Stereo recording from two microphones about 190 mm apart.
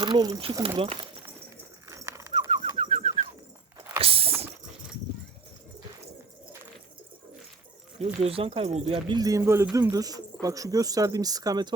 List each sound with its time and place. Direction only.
0.0 s speech: 25° right (ahead or behind)
1.9 s bird: 15° right (ahead or behind)
2.5 s bird: 25° right (ahead or behind)
4.0 s dog: 30° right (ahead or behind)
7.9 s speech: 30° right (ahead or behind)